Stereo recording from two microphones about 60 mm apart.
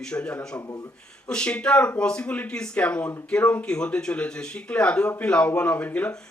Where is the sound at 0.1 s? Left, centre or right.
Centre.